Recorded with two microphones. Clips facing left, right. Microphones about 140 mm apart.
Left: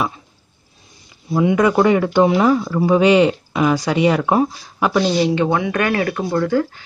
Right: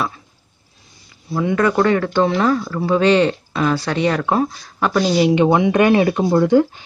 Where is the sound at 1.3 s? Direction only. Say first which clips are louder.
Left 2 dB; 15° left (ahead or behind).